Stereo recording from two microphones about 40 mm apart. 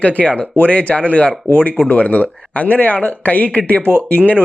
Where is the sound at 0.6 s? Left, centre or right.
Left.